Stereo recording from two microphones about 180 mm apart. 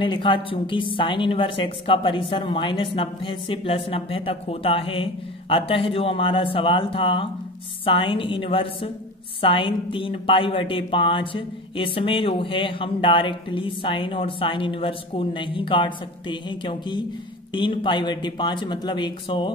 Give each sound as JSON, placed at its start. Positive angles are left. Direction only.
{"t": 0.0, "sound": "a woman's voice", "side_deg": 30}